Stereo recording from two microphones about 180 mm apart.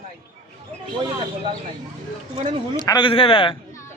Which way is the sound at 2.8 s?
25° left (ahead or behind).